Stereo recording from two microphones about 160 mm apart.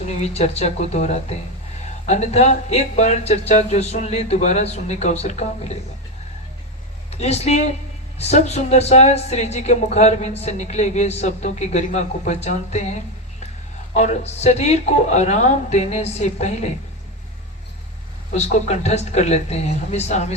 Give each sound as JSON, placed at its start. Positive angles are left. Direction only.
{"t": 0.2, "sound": "speech", "side_deg": 40}
{"t": 7.1, "sound": "speech", "side_deg": 40}
{"t": 18.3, "sound": "speech", "side_deg": 45}